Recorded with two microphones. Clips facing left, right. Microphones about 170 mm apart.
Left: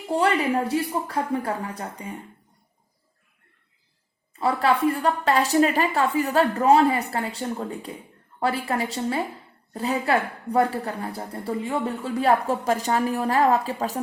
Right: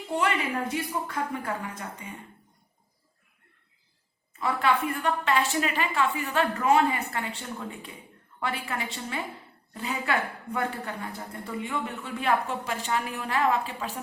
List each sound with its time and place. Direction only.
0.1 s a woman's voice: 35° left (ahead or behind)
4.4 s a woman's voice: 35° left (ahead or behind)